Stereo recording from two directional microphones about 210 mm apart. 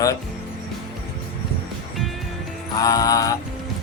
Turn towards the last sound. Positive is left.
turn(degrees=15)  # may be behind; listen again after turning